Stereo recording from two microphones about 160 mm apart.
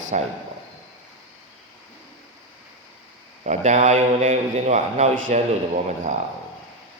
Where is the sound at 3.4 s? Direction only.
45° right (ahead or behind).